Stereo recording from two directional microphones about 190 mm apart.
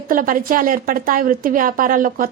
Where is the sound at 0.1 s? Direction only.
45° right (ahead or behind).